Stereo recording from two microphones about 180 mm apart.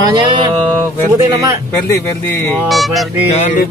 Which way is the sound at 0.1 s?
25° right (ahead or behind).